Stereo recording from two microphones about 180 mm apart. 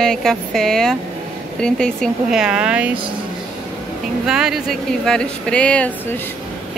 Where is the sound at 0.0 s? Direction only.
5° left (ahead or behind).